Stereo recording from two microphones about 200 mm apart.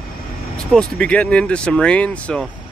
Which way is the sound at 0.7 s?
5° left (ahead or behind).